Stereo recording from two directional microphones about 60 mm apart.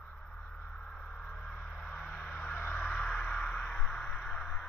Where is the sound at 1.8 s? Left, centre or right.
Centre; by 2.8 s left.